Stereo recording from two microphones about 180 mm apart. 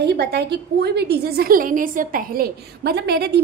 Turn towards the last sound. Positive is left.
turn(degrees=-65)  # may be behind; listen again after turning